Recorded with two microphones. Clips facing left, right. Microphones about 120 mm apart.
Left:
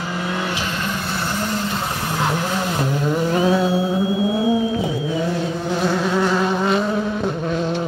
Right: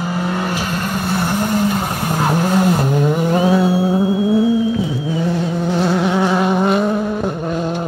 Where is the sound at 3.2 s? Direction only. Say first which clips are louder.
Right 1 dB; 10° right (ahead or behind).